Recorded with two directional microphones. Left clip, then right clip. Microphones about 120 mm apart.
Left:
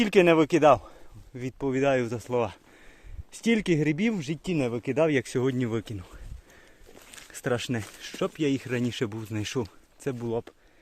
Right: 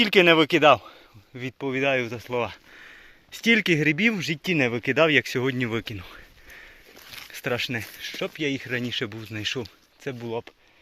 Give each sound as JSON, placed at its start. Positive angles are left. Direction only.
{"t": 0.0, "sound": "speech", "side_deg": 15}
{"t": 1.6, "sound": "speech", "side_deg": 45}
{"t": 3.3, "sound": "speech", "side_deg": 5}
{"t": 4.5, "sound": "speech", "side_deg": -10}
{"t": 5.1, "sound": "speech", "side_deg": 25}
{"t": 5.6, "sound": "a sound", "side_deg": 15}
{"t": 7.4, "sound": "speech", "side_deg": 45}
{"t": 8.0, "sound": "speech", "side_deg": 70}